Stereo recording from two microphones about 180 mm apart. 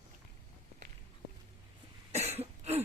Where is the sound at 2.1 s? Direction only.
35° right (ahead or behind).